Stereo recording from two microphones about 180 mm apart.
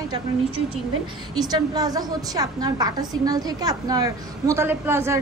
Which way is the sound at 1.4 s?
20° right (ahead or behind).